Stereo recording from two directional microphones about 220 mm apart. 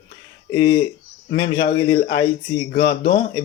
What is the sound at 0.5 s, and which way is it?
Speech, 20° left (ahead or behind).